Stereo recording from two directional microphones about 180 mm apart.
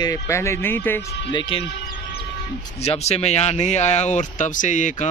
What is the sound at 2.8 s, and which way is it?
Speech, 35° left (ahead or behind).